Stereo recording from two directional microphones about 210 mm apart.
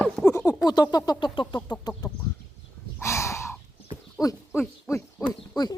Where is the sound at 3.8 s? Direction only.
15° left (ahead or behind).